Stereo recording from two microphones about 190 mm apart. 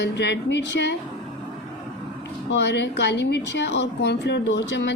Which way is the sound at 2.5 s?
65° left (ahead or behind).